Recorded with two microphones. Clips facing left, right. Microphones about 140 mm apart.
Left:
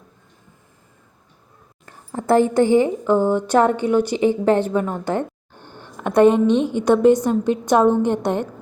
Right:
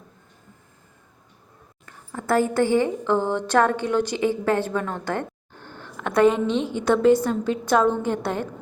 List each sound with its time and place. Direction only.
1.9 s a woman's voice: 30° left (ahead or behind)